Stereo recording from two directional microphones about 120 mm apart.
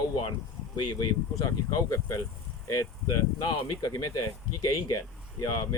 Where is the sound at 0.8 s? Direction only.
35° left (ahead or behind).